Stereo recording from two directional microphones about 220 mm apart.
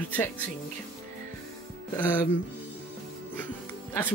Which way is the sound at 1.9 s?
10° left (ahead or behind).